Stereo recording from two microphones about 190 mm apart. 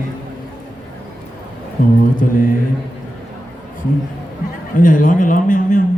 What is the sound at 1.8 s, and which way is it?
Speech, 40° left (ahead or behind).